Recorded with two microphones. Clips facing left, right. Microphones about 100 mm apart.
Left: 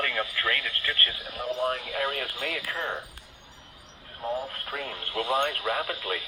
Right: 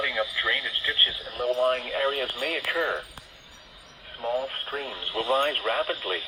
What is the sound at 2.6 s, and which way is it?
Speech, 90° right.